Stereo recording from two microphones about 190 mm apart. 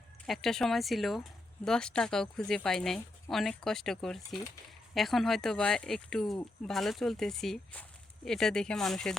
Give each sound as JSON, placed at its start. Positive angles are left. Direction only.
{"t": 0.3, "sound": "speech", "side_deg": 0}